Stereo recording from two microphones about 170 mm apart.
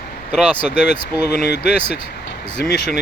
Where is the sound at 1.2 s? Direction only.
75° left (ahead or behind).